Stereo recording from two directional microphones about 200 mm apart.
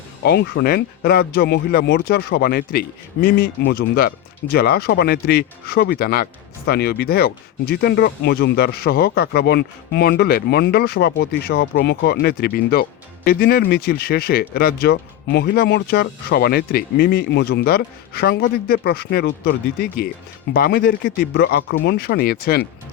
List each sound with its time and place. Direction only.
0.2 s speech: 55° left (ahead or behind)